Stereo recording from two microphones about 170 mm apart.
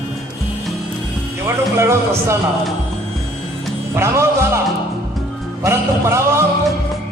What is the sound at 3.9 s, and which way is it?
Speech, 15° right (ahead or behind).